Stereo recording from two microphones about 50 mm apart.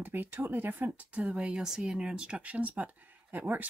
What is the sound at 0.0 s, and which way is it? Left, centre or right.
Speech, right.